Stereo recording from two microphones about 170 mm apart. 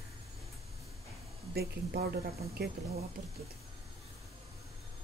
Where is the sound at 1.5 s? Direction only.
70° right (ahead or behind).